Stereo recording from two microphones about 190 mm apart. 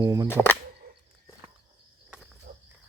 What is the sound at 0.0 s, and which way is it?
Speech, 20° right (ahead or behind).